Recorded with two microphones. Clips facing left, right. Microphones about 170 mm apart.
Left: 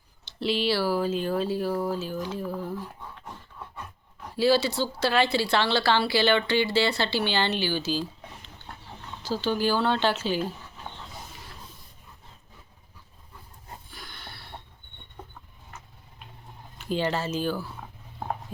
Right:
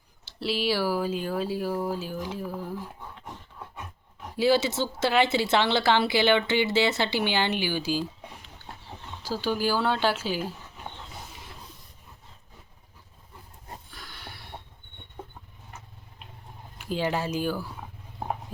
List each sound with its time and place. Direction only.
0.3 s speech: 5° right (ahead or behind)
13.9 s a sound: centre (ahead or behind)
16.7 s speech: 5° right (ahead or behind)